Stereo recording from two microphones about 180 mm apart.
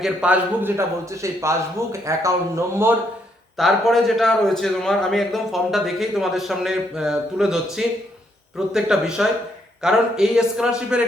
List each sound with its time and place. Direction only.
0.0 s a man's voice: 5° right (ahead or behind)
3.6 s a man's voice: centre (ahead or behind)